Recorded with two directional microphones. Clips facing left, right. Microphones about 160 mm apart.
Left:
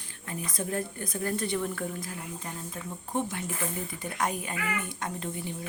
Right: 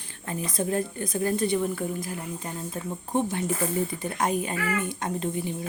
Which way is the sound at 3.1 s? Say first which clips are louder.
Right 6 dB; 25° right (ahead or behind).